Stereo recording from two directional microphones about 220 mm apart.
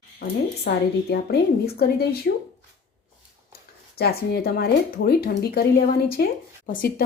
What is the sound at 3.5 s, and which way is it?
Speech, 45° left (ahead or behind).